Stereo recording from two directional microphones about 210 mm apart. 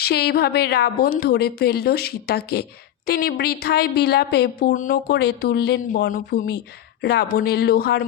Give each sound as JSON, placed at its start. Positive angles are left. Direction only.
{"t": 0.0, "sound": "speech", "side_deg": 50}